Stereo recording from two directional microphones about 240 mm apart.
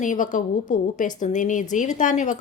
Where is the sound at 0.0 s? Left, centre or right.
Left.